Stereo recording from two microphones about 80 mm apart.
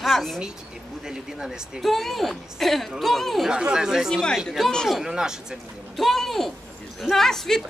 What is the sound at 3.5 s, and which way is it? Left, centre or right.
Speech, centre.